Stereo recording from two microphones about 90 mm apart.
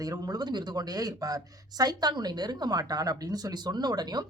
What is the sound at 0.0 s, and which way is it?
Speech, 45° right (ahead or behind).